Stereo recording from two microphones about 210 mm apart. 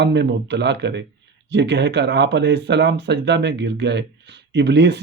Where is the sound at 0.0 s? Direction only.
55° right (ahead or behind).